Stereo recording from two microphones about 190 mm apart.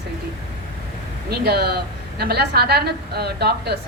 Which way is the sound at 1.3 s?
55° right (ahead or behind).